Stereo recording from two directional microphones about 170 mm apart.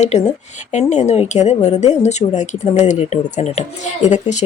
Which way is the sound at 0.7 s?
45° left (ahead or behind).